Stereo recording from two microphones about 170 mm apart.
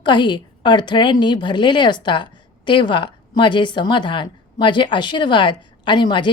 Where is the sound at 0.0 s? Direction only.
25° left (ahead or behind).